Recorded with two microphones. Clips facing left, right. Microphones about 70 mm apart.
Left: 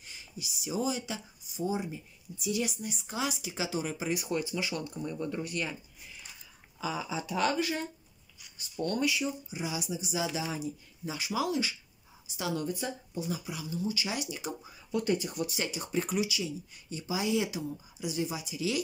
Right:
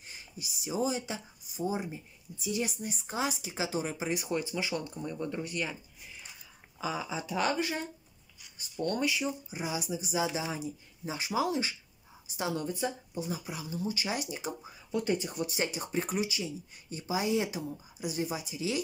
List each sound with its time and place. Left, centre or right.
0.4 s speech: right
5.0 s speech: centre
7.2 s speech: centre
8.8 s speech: right
13.4 s speech: right